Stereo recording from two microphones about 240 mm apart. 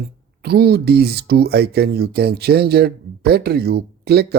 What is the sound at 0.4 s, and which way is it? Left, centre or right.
Speech, right.